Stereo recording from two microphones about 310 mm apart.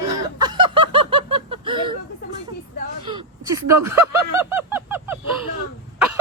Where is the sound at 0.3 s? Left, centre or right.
Centre.